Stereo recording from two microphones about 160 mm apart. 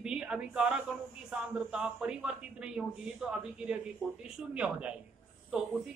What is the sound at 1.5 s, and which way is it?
A man's voice, 5° right (ahead or behind).